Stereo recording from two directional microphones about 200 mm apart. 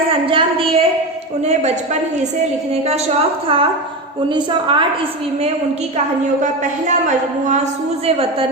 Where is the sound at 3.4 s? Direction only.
25° right (ahead or behind).